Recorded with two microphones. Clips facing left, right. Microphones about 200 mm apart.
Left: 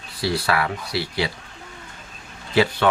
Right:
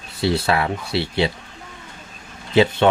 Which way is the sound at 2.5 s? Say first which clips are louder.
Right 4 dB; 25° right (ahead or behind).